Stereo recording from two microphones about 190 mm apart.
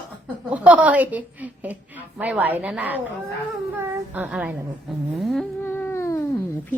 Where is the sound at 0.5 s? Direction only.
5° right (ahead or behind).